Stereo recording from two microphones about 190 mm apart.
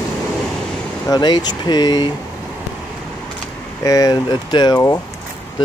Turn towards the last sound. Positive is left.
turn(degrees=20)  # may be behind; listen again after turning